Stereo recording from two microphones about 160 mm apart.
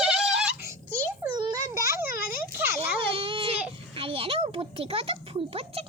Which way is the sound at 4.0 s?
35° right (ahead or behind).